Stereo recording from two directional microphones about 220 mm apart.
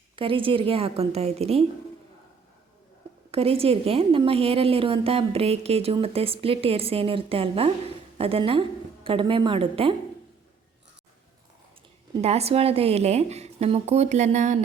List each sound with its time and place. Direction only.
0.2 s a woman's voice: 25° right (ahead or behind)
3.3 s a woman's voice: 25° right (ahead or behind)
12.2 s a woman's voice: 30° right (ahead or behind)